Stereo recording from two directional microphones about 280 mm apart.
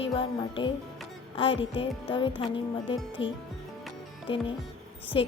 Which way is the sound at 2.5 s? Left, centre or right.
Left.